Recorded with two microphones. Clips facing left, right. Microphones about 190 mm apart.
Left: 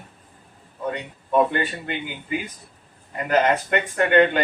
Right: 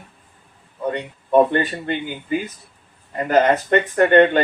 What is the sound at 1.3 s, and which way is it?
Speech, 35° right (ahead or behind).